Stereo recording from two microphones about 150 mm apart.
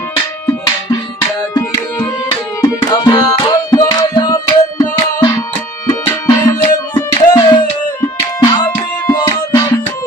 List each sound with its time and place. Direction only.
2.6 s music: 25° left (ahead or behind)
8.6 s music: 15° left (ahead or behind)